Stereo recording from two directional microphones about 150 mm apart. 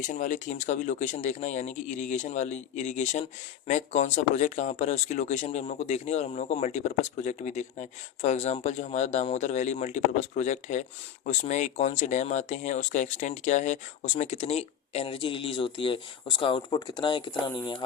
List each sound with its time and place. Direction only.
0.0 s speech: 60° left (ahead or behind); by 17.8 s 30° left (ahead or behind)